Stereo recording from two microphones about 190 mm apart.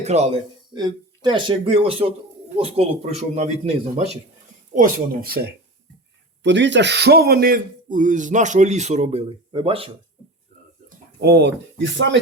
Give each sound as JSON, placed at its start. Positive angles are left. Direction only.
{"t": 0.0, "sound": "a man's voice", "side_deg": -35}
{"t": 0.7, "sound": "a man's voice", "side_deg": -20}
{"t": 4.7, "sound": "speech", "side_deg": -45}
{"t": 6.4, "sound": "a man's voice", "side_deg": -70}
{"t": 10.8, "sound": "speech", "side_deg": -55}